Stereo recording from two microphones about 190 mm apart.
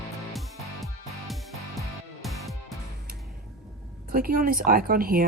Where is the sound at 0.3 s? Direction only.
Centre (ahead or behind).